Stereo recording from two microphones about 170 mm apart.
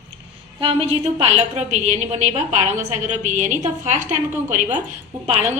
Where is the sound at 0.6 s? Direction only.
35° right (ahead or behind).